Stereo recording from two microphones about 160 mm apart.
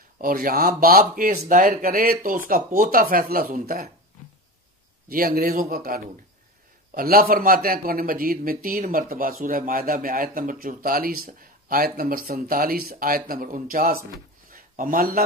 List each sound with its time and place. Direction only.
0.2 s a man's voice: 65° right (ahead or behind)
1.4 s a man's voice: 50° right (ahead or behind); by 3.9 s 70° right (ahead or behind)
5.0 s a man's voice: 65° right (ahead or behind)
14.5 s a sound: 60° right (ahead or behind)